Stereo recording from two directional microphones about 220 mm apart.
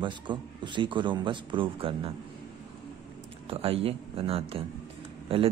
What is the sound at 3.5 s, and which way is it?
Speech, 25° right (ahead or behind).